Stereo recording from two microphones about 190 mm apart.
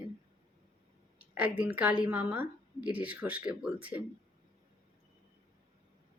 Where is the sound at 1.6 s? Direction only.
10° right (ahead or behind).